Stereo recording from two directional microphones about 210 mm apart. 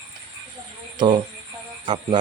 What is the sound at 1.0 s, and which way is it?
Speech, 20° right (ahead or behind).